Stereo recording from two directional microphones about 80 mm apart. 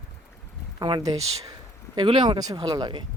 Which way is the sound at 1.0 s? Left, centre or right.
Right.